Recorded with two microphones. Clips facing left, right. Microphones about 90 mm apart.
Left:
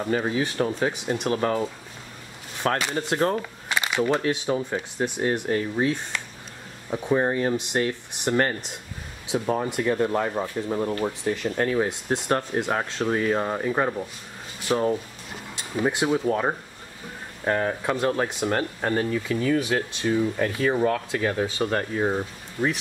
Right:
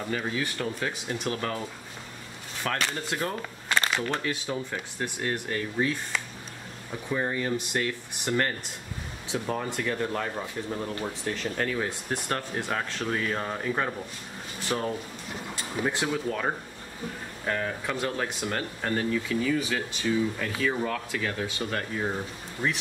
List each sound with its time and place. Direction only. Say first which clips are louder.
0.0 s speech: left 6 dB; 30° left (ahead or behind)
2.6 s speech: left 6 dB; 35° left (ahead or behind)
3.6 s a sound: right 3 dB; 15° left (ahead or behind)
4.0 s speech: left 7 dB; 20° left (ahead or behind)
6.9 s speech: left 7 dB; 35° left (ahead or behind)
7.5 s speech: left 4 dB; 25° left (ahead or behind)
14.7 s speech: left 7 dB; 10° left (ahead or behind)
16.1 s speech: left 6 dB; 30° left (ahead or behind)
17.5 s speech: left 6 dB; 35° left (ahead or behind)
19.5 s speech: left 5 dB; 50° left (ahead or behind)
21.1 s speech: left 6 dB; 30° left (ahead or behind)